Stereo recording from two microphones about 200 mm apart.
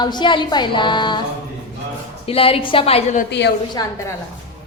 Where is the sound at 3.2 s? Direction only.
55° left (ahead or behind).